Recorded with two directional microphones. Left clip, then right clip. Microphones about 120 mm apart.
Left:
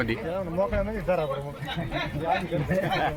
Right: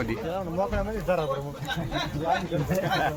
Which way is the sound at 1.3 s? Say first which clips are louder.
Right 1 dB; 35° right (ahead or behind).